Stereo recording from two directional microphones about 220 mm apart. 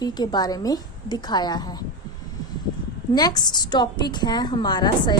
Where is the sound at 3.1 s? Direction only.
20° left (ahead or behind).